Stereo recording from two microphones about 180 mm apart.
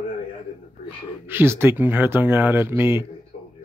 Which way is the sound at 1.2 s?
10° right (ahead or behind).